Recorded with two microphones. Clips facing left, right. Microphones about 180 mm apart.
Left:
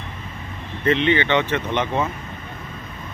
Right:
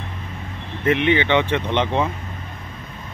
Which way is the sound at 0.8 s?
15° right (ahead or behind).